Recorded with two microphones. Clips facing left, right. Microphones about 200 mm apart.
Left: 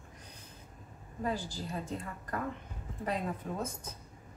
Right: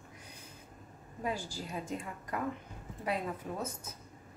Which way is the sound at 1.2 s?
10° right (ahead or behind).